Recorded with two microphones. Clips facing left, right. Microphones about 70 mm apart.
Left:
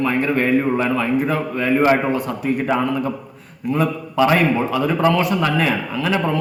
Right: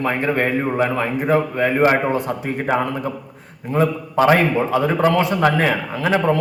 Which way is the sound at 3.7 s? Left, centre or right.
Right.